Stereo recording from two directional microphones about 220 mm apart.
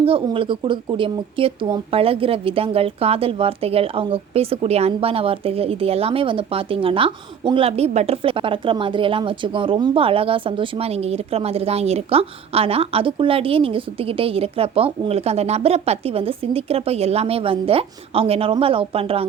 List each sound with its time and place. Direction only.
0.0 s speech: 25° right (ahead or behind)